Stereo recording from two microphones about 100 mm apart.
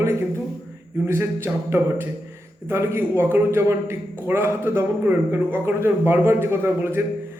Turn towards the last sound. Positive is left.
turn(degrees=-25)  # may be behind; listen again after turning